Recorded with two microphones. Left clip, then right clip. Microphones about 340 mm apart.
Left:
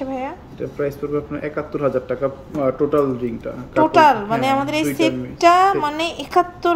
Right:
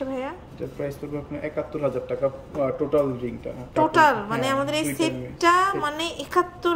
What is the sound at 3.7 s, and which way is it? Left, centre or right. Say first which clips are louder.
A woman's voice: left 5 dB; centre.